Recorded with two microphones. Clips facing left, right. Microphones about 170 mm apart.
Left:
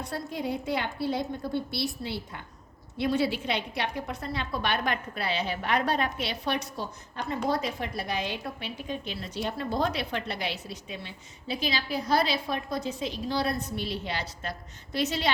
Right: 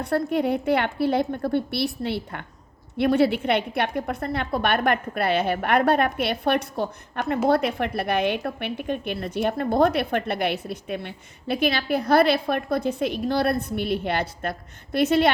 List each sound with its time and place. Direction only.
0.0 s a woman's voice: 60° right (ahead or behind)